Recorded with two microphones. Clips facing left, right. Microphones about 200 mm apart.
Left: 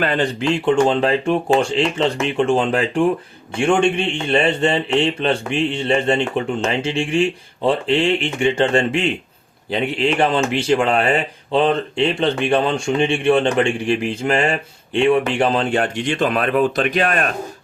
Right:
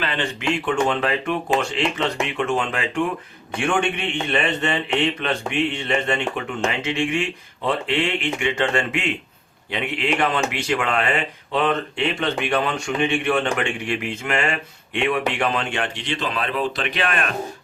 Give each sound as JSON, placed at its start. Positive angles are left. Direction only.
{"t": 0.0, "sound": "a man's voice", "side_deg": 40}